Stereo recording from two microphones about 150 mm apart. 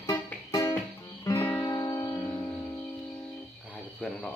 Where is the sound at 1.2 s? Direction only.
15° left (ahead or behind).